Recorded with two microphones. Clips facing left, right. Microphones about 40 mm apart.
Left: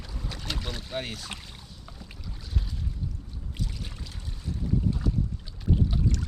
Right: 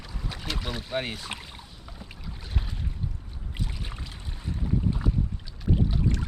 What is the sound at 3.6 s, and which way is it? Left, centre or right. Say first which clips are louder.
Boat: right 1 dB; right.